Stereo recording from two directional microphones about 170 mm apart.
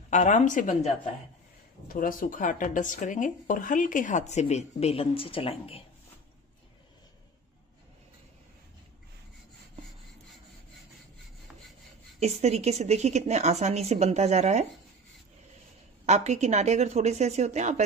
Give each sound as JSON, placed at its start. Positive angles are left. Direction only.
{"t": 0.1, "sound": "speech", "side_deg": 45}
{"t": 12.2, "sound": "a woman's voice", "side_deg": -40}
{"t": 16.1, "sound": "a woman's voice", "side_deg": -40}